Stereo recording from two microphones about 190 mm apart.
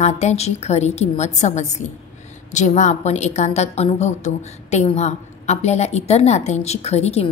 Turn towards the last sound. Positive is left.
turn(degrees=35)  # may be behind; listen again after turning